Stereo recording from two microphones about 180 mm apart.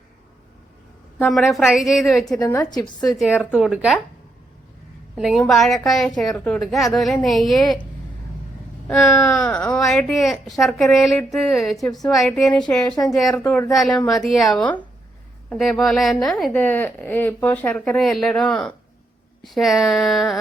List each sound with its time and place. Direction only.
1.2 s a woman's voice: centre (ahead or behind)
2.5 s a woman's voice: 20° left (ahead or behind)
3.3 s a woman's voice: 5° right (ahead or behind)
5.1 s a woman's voice: centre (ahead or behind)
8.9 s a woman's voice: 5° left (ahead or behind)